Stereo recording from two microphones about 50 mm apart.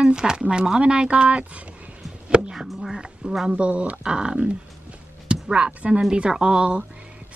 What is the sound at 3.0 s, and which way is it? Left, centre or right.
Speech, centre.